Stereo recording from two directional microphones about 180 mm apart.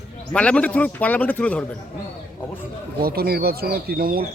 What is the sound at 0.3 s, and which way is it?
A man's voice, 5° left (ahead or behind).